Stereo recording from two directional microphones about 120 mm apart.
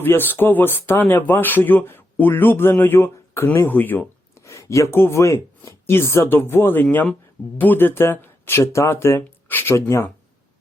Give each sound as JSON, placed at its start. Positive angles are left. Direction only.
{"t": 0.0, "sound": "speech", "side_deg": 15}